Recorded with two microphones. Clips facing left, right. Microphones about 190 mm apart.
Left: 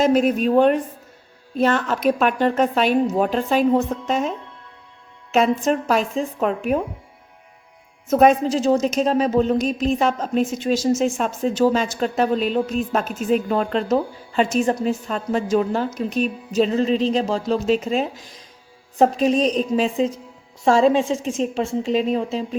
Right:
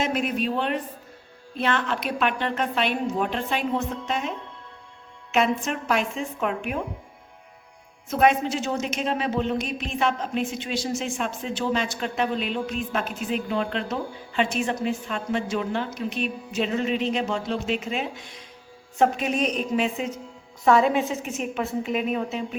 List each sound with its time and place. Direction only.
0.0 s a woman's voice: 40° left (ahead or behind)
8.0 s a woman's voice: 40° left (ahead or behind)